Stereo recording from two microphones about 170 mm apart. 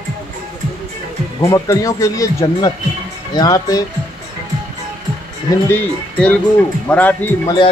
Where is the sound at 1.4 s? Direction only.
20° left (ahead or behind).